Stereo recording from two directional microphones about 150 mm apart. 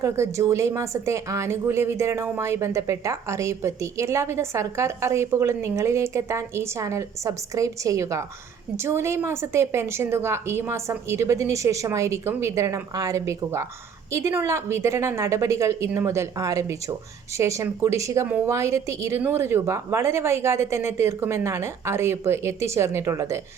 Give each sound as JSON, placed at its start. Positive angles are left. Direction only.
{"t": 0.0, "sound": "a woman's voice", "side_deg": -20}
{"t": 18.3, "sound": "a woman's voice", "side_deg": -10}
{"t": 18.5, "sound": "a woman's voice", "side_deg": -20}